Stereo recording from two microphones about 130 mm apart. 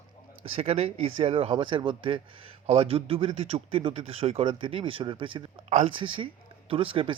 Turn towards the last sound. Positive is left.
turn(degrees=-40)  # may be behind; listen again after turning